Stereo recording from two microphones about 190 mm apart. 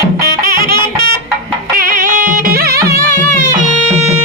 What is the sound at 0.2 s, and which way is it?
Music, 50° right (ahead or behind).